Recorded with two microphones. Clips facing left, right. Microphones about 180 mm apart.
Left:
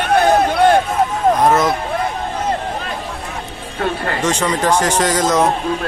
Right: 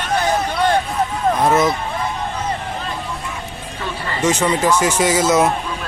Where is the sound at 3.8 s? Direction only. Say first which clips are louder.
Left 7 dB; 60° left (ahead or behind).